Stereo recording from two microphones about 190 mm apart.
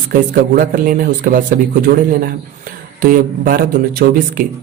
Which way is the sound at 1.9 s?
55° right (ahead or behind).